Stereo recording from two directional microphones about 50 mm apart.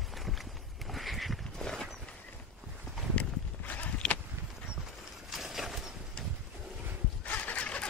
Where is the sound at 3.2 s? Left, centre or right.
Left.